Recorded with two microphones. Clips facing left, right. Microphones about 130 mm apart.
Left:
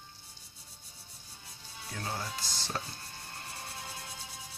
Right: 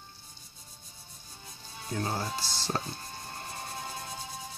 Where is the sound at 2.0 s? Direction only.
35° right (ahead or behind).